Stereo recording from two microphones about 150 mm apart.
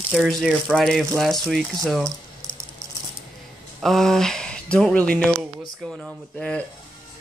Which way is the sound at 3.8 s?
Centre (ahead or behind).